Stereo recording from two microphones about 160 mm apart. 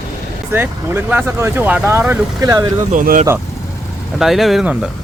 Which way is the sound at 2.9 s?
60° right (ahead or behind).